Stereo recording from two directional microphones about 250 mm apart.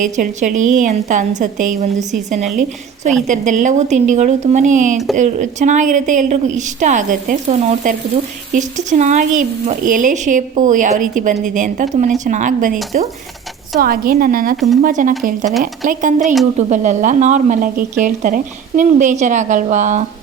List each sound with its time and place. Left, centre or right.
0.0 s a woman's voice: right